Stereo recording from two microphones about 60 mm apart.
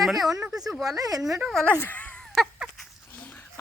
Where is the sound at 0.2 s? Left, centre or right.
Right.